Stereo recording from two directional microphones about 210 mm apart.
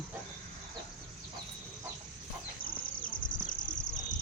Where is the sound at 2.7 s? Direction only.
40° left (ahead or behind).